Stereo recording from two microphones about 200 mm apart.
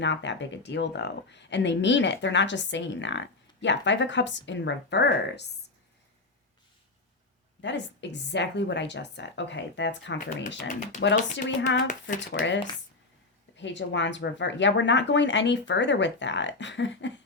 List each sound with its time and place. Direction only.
0.0 s speech: 65° left (ahead or behind)
7.6 s speech: 60° left (ahead or behind)